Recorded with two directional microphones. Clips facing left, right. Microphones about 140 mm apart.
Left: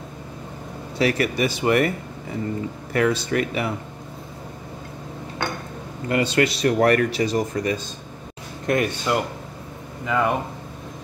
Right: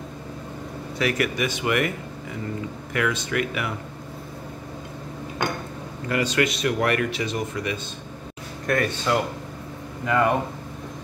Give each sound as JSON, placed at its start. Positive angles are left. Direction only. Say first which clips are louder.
{"t": 0.9, "sound": "speech", "louder": "left 3 dB", "side_deg": 30}
{"t": 2.9, "sound": "speech", "louder": "left 5 dB", "side_deg": 35}
{"t": 6.0, "sound": "speech", "louder": "left 3 dB", "side_deg": 30}
{"t": 8.6, "sound": "speech", "louder": "left 2 dB", "side_deg": 20}
{"t": 10.0, "sound": "speech", "louder": "right 1 dB", "side_deg": 5}